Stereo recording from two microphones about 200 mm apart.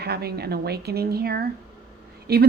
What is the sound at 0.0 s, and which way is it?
A woman's voice, 50° right (ahead or behind).